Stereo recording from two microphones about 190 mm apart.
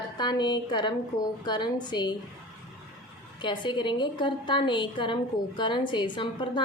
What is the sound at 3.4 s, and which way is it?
A woman's voice, 25° left (ahead or behind).